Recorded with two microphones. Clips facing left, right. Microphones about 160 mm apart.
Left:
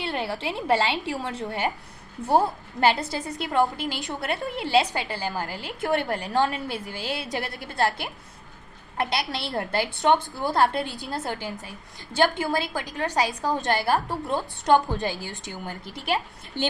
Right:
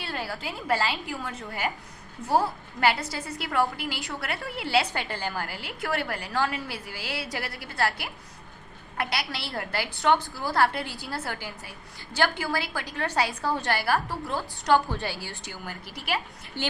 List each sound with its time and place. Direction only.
0.0 s a woman's voice: 25° left (ahead or behind)